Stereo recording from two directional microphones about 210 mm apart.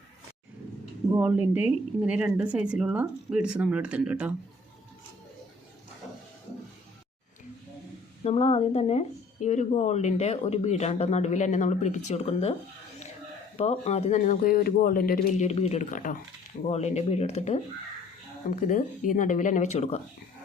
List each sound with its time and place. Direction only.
1.1 s a woman's voice: 10° right (ahead or behind)
8.2 s speech: 30° left (ahead or behind)
13.6 s speech: 30° left (ahead or behind)